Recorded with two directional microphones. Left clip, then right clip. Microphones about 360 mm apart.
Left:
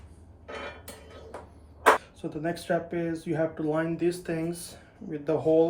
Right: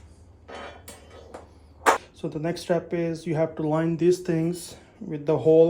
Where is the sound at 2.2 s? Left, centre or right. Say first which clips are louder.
Right 3 dB; right.